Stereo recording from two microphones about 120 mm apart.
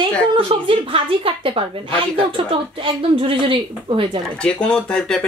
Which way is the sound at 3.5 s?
45° right (ahead or behind).